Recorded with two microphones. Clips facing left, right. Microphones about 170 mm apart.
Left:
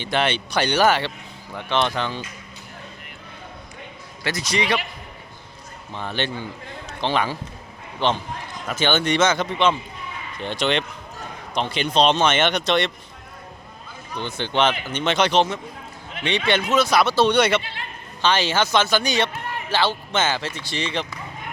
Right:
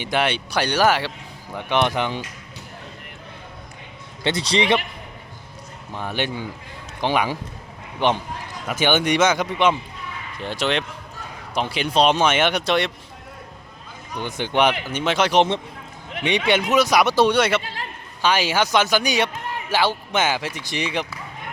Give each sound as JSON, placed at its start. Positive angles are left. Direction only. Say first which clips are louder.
{"t": 0.0, "sound": "speech", "louder": "even", "side_deg": -10}
{"t": 4.2, "sound": "speech", "louder": "right 4 dB", "side_deg": -25}
{"t": 5.9, "sound": "speech", "louder": "right 1 dB", "side_deg": -10}
{"t": 14.1, "sound": "speech", "louder": "right 1 dB", "side_deg": -15}
{"t": 15.4, "sound": "speech", "louder": "right 2 dB", "side_deg": -25}
{"t": 16.2, "sound": "speech", "louder": "right 2 dB", "side_deg": -15}
{"t": 17.3, "sound": "speech", "louder": "left 1 dB", "side_deg": -5}
{"t": 17.6, "sound": "a man's voice", "louder": "right 3 dB", "side_deg": -40}
{"t": 18.2, "sound": "speech", "louder": "even", "side_deg": -10}